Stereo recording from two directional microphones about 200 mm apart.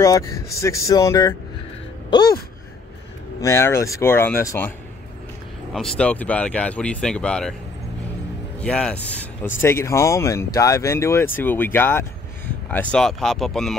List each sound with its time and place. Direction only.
0.0 s speech: 15° left (ahead or behind)
3.3 s speech: 15° left (ahead or behind)
8.5 s speech: 5° left (ahead or behind)